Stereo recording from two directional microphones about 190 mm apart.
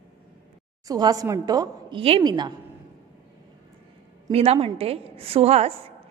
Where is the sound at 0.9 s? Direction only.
20° right (ahead or behind).